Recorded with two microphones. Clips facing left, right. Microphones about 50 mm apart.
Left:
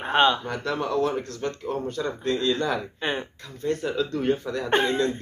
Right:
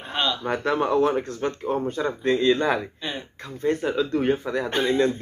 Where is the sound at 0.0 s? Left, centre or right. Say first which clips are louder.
Left 6 dB; left.